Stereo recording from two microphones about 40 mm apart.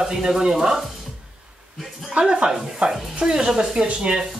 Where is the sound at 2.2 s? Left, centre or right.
Centre.